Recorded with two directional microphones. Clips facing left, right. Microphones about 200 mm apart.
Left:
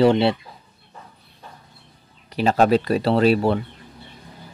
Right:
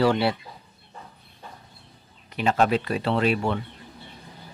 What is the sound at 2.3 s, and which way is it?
Speech, 35° left (ahead or behind).